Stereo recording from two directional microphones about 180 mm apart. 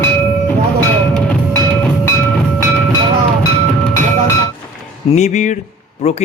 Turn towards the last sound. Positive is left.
turn(degrees=40)  # may be behind; listen again after turning